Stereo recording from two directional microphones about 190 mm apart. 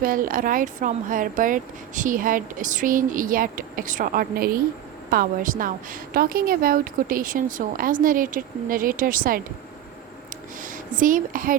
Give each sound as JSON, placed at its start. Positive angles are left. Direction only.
{"t": 0.0, "sound": "speech", "side_deg": -45}
{"t": 10.6, "sound": "a woman's voice", "side_deg": -45}